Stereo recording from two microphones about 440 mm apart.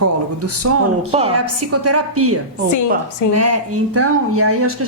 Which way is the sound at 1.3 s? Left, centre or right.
Right.